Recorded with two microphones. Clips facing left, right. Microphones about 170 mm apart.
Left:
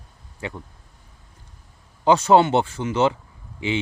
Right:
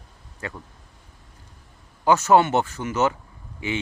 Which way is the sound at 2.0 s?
20° left (ahead or behind).